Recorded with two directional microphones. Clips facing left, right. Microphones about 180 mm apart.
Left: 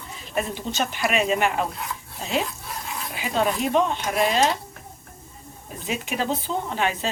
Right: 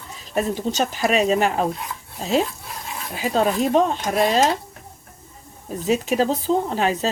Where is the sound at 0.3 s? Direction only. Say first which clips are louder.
Right 5 dB; 40° right (ahead or behind).